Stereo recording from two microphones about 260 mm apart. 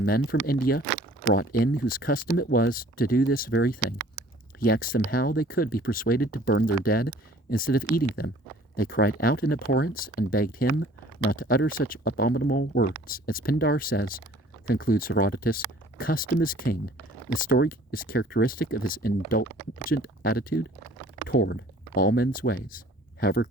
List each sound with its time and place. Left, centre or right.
0.3 s speech: left